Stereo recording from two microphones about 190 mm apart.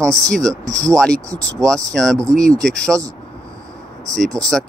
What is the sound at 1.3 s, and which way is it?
Speech, 15° right (ahead or behind).